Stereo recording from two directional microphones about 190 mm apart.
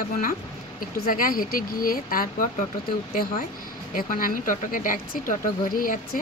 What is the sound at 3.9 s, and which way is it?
Speech, 45° left (ahead or behind).